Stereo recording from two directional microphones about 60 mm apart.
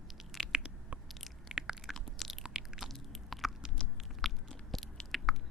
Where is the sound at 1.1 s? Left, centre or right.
Centre.